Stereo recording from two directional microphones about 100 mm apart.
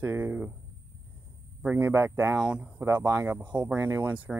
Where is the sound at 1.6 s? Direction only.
20° right (ahead or behind).